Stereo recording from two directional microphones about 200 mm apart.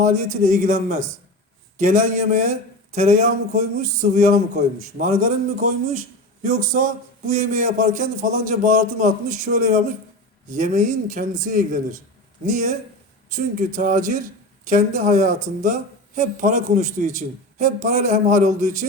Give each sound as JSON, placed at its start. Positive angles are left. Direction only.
{"t": 0.0, "sound": "speech", "side_deg": -35}
{"t": 6.4, "sound": "speech", "side_deg": -40}
{"t": 13.7, "sound": "speech", "side_deg": -40}